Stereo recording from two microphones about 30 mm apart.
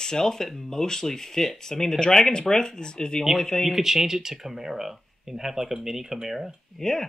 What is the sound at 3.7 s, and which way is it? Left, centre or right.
Speech, centre.